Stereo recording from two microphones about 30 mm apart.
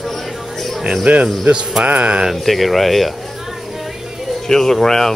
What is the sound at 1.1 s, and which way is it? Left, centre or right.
Music, right.